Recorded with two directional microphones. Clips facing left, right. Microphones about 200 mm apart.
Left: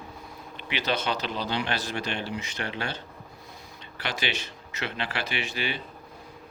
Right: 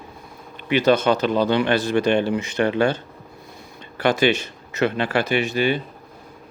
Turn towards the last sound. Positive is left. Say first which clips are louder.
# right 12 dB
turn(degrees=-45)  # may be behind; listen again after turning